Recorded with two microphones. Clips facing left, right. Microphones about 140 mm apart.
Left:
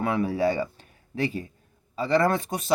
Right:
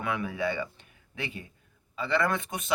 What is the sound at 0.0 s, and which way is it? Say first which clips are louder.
Speech: left 7 dB; 35° left (ahead or behind).